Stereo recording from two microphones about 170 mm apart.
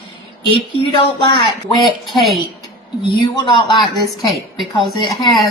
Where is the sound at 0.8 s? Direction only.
30° left (ahead or behind).